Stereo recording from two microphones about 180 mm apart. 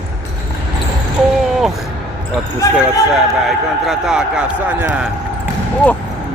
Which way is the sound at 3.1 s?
Centre (ahead or behind).